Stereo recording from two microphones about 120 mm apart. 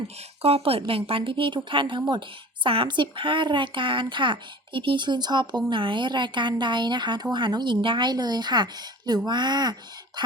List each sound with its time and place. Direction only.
0.2 s a woman's voice: 55° right (ahead or behind); by 10.3 s 35° right (ahead or behind)